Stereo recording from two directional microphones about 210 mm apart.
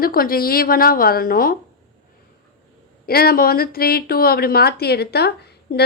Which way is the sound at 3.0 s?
45° left (ahead or behind).